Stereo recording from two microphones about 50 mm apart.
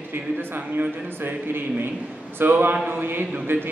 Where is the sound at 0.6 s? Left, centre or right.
Right.